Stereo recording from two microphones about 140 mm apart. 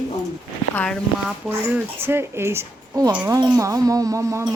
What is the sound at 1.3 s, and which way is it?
A woman's voice, 10° right (ahead or behind).